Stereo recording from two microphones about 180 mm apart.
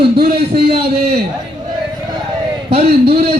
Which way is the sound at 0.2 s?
60° right (ahead or behind).